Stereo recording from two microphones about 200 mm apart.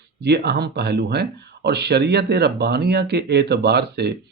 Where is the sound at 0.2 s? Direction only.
55° right (ahead or behind).